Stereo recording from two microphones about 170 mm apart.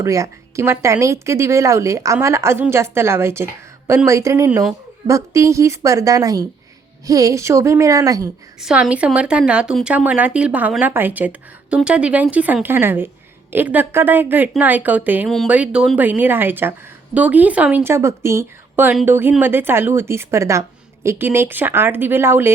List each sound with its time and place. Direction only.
0.0 s a woman's voice: 15° right (ahead or behind)
8.6 s a woman's voice: 5° right (ahead or behind)